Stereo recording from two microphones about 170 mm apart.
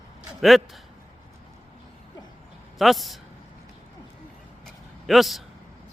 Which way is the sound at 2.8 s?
Centre (ahead or behind).